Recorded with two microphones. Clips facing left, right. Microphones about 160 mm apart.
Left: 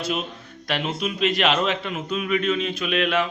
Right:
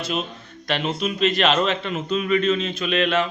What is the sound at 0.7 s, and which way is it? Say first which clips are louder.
A man's voice: right 2 dB; 10° left (ahead or behind).